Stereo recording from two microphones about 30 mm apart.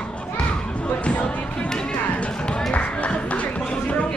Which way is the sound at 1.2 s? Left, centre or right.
Left.